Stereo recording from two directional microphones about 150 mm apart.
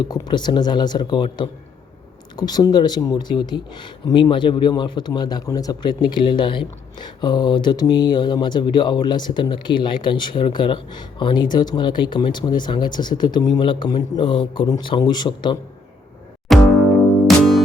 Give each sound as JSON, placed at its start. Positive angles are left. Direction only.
{"t": 0.0, "sound": "speech", "side_deg": 30}
{"t": 16.5, "sound": "music", "side_deg": 0}